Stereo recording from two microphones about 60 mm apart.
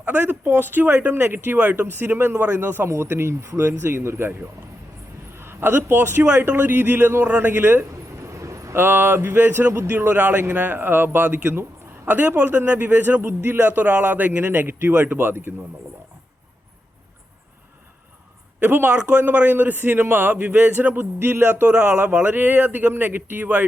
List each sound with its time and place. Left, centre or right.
0.0 s speech: right
5.4 s a man's voice: right
8.2 s vehicle: right
8.7 s speech: right
13.2 s speech: right
13.7 s a man's voice: right
14.4 s speech: right
18.6 s speech: right
22.2 s speech: right